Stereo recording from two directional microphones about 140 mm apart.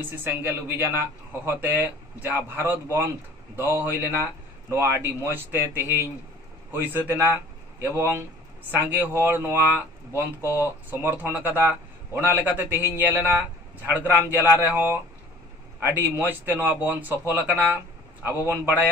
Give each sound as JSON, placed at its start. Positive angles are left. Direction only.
{"t": 0.0, "sound": "speech", "side_deg": -15}